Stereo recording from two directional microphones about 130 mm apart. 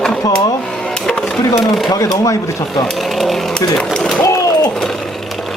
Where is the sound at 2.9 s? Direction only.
Centre (ahead or behind).